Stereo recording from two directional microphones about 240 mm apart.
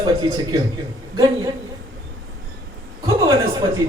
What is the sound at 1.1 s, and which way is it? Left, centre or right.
Speech, centre.